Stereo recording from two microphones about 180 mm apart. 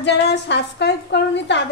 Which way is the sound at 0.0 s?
75° left (ahead or behind).